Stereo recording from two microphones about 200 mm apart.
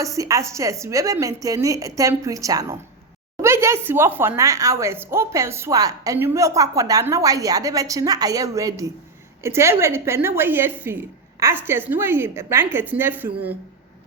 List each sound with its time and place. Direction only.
0.0 s speech: 15° right (ahead or behind)